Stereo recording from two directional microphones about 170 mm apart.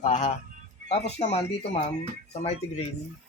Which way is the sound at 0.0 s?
45° left (ahead or behind).